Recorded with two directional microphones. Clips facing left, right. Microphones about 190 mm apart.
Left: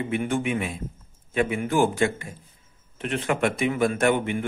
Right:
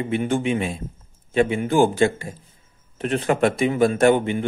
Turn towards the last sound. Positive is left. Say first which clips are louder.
# right 5 dB
turn(degrees=-30)  # may be behind; listen again after turning